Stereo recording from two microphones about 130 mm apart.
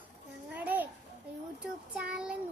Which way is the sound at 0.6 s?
15° right (ahead or behind).